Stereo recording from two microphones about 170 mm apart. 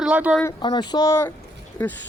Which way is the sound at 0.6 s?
25° left (ahead or behind).